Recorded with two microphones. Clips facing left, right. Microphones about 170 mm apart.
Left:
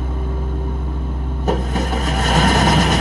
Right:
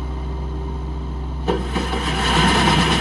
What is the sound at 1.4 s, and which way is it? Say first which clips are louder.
Vehicle: left 1 dB; 40° left (ahead or behind).